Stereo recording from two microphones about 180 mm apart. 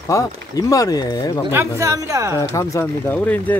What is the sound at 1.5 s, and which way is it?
Speech, 15° right (ahead or behind).